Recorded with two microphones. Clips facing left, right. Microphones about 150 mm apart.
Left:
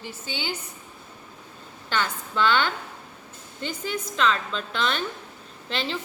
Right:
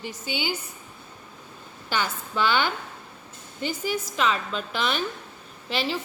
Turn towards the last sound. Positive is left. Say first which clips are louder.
# right 2 dB
turn(degrees=-5)  # may be behind; listen again after turning